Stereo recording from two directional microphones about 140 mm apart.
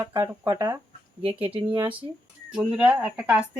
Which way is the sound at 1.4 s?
10° right (ahead or behind).